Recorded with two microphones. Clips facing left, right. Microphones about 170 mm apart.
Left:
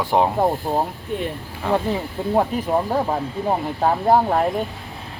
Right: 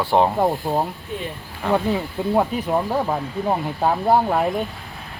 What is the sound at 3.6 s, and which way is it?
Speech, centre (ahead or behind).